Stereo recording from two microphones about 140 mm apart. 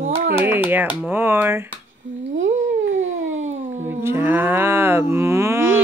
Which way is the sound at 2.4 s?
60° right (ahead or behind).